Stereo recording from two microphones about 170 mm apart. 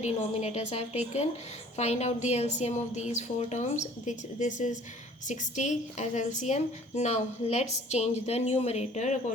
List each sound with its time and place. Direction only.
0.0 s a woman's voice: 40° left (ahead or behind)